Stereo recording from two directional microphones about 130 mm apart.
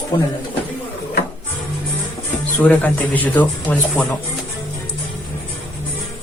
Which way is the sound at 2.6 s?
10° left (ahead or behind).